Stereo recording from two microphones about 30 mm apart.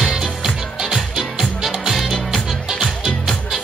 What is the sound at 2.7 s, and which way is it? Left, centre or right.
Music, centre.